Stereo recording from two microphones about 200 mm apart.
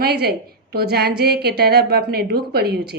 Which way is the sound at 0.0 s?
55° right (ahead or behind).